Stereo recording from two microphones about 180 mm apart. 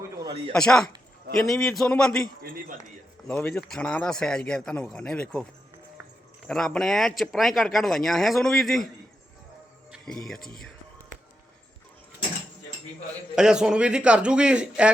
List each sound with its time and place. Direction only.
0.0 s a sound: 20° right (ahead or behind)
0.5 s speech: 5° left (ahead or behind)
3.2 s speech: 5° left (ahead or behind)
6.5 s speech: centre (ahead or behind)
9.9 s speech: centre (ahead or behind)
13.3 s speech: 5° right (ahead or behind)